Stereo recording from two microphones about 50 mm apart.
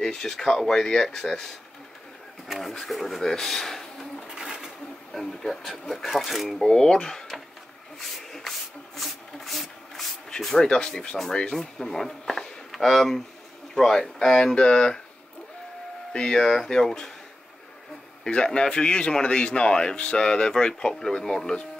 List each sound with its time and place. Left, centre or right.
0.0 s a man's voice: centre
2.4 s speech: centre
2.7 s filing: centre
5.1 s speech: centre
6.6 s speech: centre
8.0 s a sound: centre
10.4 s a man's voice: centre
16.1 s a man's voice: centre
18.3 s a man's voice: centre